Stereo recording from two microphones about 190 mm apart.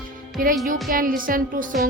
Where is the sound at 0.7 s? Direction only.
45° right (ahead or behind).